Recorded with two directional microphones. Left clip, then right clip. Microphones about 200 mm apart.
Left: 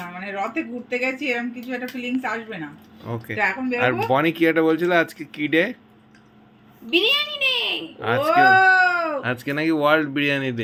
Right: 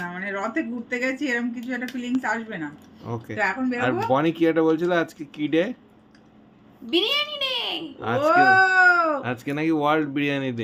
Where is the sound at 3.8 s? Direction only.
5° right (ahead or behind).